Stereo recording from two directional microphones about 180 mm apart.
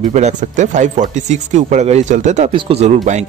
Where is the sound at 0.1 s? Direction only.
40° right (ahead or behind).